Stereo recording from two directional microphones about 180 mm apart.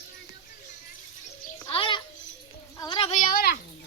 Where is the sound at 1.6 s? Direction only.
30° left (ahead or behind).